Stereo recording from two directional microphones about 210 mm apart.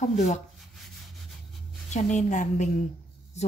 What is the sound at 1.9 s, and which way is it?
Speech, 35° left (ahead or behind).